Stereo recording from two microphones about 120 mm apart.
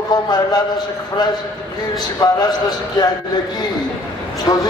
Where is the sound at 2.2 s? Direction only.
35° left (ahead or behind).